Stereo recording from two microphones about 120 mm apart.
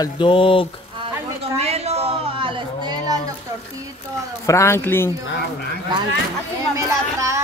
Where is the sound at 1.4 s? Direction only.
60° right (ahead or behind); by 3.2 s 35° right (ahead or behind).